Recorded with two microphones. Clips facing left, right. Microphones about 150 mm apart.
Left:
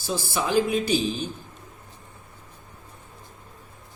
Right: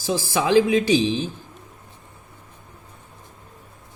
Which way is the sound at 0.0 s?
90° right.